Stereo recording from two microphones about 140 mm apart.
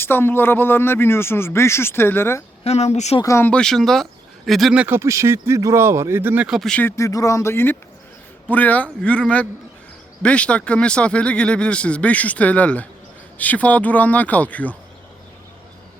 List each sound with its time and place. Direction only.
0.0 s speech: 15° left (ahead or behind)
2.6 s speech: 50° left (ahead or behind)
3.2 s speech: 20° left (ahead or behind)
3.5 s speech: 5° left (ahead or behind); by 6.5 s 15° right (ahead or behind)
6.5 s speech: 5° left (ahead or behind)
6.9 s speech: 20° left (ahead or behind)